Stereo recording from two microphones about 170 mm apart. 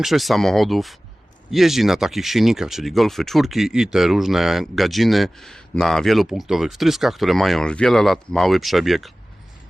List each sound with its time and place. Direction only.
0.0 s speech: centre (ahead or behind)